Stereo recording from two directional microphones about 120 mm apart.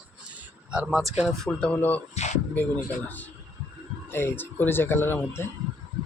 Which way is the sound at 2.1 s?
75° left (ahead or behind).